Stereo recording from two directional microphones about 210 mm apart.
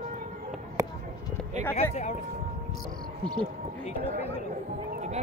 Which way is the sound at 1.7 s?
30° left (ahead or behind).